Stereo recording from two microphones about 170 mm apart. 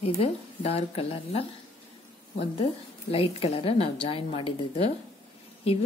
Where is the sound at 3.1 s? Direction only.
35° left (ahead or behind).